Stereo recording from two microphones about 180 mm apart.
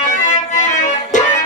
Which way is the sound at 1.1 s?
45° left (ahead or behind).